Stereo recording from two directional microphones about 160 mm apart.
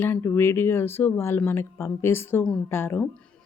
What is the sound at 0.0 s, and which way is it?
A woman's voice, 15° left (ahead or behind).